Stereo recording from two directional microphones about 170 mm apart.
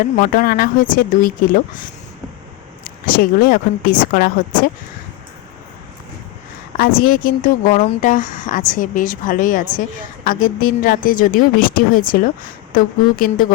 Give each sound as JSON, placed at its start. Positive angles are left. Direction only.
{"t": 0.3, "sound": "speech", "side_deg": 55}
{"t": 3.1, "sound": "a woman's voice", "side_deg": 60}
{"t": 6.7, "sound": "a woman's voice", "side_deg": 60}
{"t": 7.7, "sound": "a woman's voice", "side_deg": 40}